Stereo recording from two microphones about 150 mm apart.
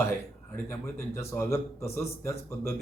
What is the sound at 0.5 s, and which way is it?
Speech, 20° left (ahead or behind).